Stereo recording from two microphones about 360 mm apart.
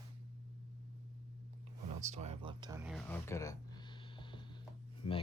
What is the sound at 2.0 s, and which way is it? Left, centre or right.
Speech, centre.